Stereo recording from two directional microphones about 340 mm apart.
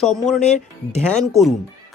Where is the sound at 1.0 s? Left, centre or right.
Centre.